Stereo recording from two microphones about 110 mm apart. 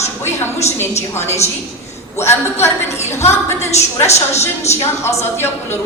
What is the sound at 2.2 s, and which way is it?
A woman's voice, 20° left (ahead or behind).